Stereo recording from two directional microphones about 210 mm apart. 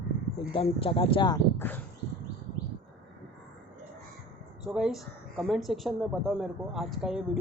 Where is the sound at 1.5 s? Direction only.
10° left (ahead or behind).